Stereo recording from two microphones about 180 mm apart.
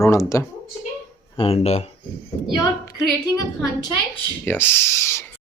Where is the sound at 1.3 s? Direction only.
30° left (ahead or behind).